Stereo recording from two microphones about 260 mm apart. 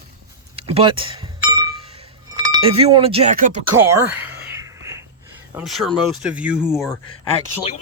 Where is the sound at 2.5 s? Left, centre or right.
Right.